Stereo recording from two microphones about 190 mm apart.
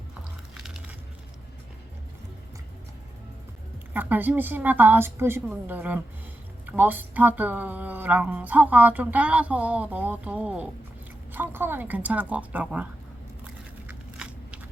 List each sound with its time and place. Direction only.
3.9 s speech: 10° right (ahead or behind)
13.8 s scissors: 5° right (ahead or behind)